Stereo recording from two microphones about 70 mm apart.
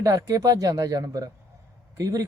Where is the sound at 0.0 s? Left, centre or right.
Right.